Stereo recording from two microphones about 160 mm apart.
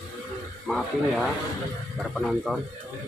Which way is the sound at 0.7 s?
Centre (ahead or behind).